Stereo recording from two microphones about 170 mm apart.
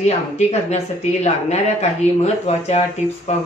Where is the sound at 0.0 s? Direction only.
40° left (ahead or behind).